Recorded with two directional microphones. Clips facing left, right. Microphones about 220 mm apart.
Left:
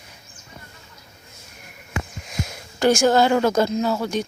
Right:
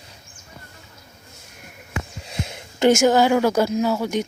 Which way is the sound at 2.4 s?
25° right (ahead or behind).